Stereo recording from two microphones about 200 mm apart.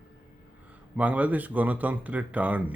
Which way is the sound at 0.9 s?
5° right (ahead or behind).